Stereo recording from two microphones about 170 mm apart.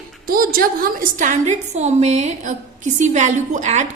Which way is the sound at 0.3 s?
55° right (ahead or behind).